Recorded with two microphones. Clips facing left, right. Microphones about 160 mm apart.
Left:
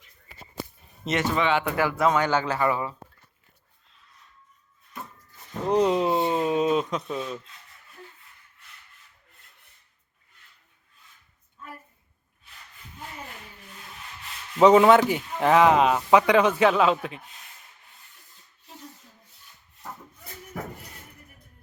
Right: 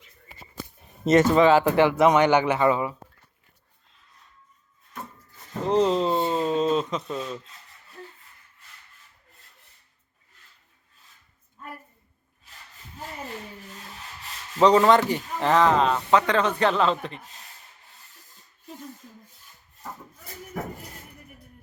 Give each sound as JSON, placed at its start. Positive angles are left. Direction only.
{"t": 1.0, "sound": "speech", "side_deg": -45}
{"t": 5.6, "sound": "speech", "side_deg": 10}
{"t": 14.6, "sound": "speech", "side_deg": 5}